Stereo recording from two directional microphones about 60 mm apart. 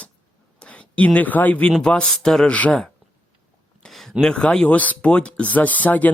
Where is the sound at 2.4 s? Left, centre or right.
Left.